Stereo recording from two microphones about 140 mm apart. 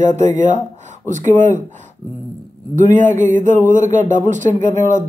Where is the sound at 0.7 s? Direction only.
60° right (ahead or behind).